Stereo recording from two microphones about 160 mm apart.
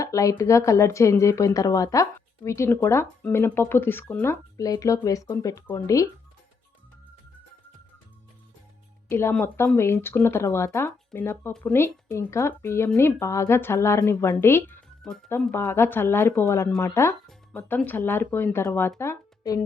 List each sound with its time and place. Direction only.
0.0 s a woman's voice: 20° left (ahead or behind)
9.0 s a woman's voice: 15° left (ahead or behind)